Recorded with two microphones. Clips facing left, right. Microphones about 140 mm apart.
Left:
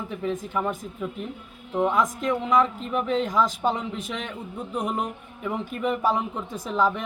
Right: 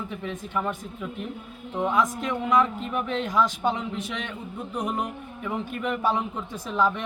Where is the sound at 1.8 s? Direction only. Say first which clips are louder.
Left 1 dB; centre (ahead or behind).